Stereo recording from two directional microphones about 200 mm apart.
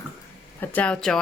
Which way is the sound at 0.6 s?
5° left (ahead or behind).